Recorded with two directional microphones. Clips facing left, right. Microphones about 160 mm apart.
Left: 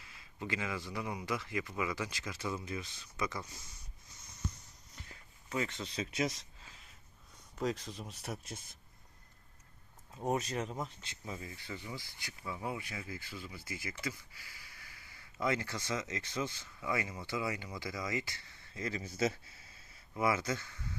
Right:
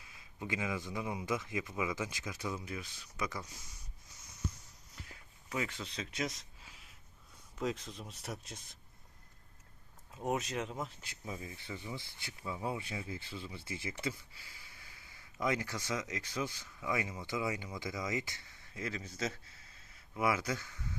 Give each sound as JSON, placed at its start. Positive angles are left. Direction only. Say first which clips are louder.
{"t": 0.0, "sound": "speech", "louder": "left 1 dB", "side_deg": -15}
{"t": 4.9, "sound": "a sound", "louder": "right 1 dB", "side_deg": -5}
{"t": 5.9, "sound": "speech", "louder": "left 4 dB", "side_deg": 5}
{"t": 6.7, "sound": "a sound", "louder": "even", "side_deg": -5}
{"t": 7.6, "sound": "speech", "louder": "left 1 dB", "side_deg": 0}
{"t": 10.2, "sound": "speech", "louder": "left 1 dB", "side_deg": 0}
{"t": 11.0, "sound": "speech", "louder": "even", "side_deg": -10}
{"t": 18.8, "sound": "speech", "louder": "left 4 dB", "side_deg": 0}
{"t": 20.1, "sound": "speech", "louder": "left 1 dB", "side_deg": -10}